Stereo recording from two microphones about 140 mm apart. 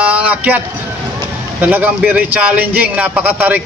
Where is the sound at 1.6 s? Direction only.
10° right (ahead or behind).